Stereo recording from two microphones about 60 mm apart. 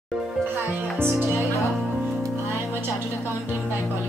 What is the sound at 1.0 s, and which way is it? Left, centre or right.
Speech, right.